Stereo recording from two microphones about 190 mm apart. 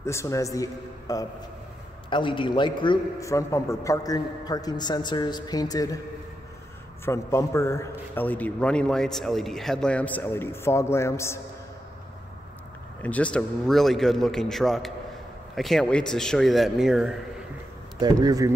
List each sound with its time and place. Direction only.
0.0 s a man's voice: 15° left (ahead or behind)
7.1 s a man's voice: 15° left (ahead or behind)
13.0 s a man's voice: 5° left (ahead or behind)
17.9 s speech: 20° right (ahead or behind)